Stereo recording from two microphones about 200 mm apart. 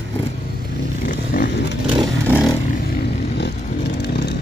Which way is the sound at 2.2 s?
5° right (ahead or behind).